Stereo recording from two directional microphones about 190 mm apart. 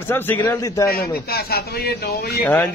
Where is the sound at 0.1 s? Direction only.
10° left (ahead or behind).